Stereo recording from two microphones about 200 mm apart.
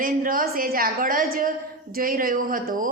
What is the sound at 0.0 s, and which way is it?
A woman's voice, 45° right (ahead or behind).